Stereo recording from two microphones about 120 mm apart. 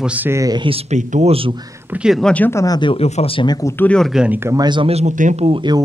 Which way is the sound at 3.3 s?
35° left (ahead or behind).